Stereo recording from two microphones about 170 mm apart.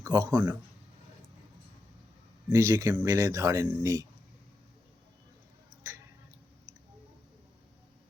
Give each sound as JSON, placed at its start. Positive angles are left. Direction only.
{"t": 0.0, "sound": "speech", "side_deg": -15}
{"t": 2.5, "sound": "speech", "side_deg": -20}